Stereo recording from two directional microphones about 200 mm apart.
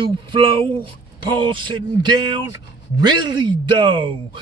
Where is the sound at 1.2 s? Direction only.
25° right (ahead or behind).